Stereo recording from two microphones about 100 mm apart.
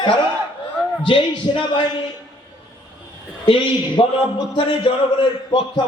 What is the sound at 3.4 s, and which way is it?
Speech, 55° left (ahead or behind).